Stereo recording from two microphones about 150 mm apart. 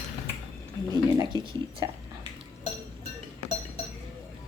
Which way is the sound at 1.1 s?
25° right (ahead or behind).